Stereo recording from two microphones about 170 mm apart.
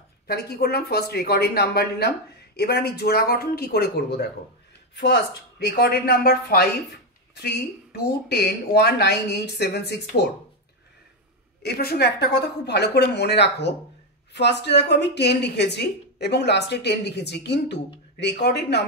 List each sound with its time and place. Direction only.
0.3 s speech: 65° left (ahead or behind)
4.9 s a woman's voice: 85° left
5.8 s speech: 65° left (ahead or behind)
11.6 s a woman's voice: 70° left (ahead or behind)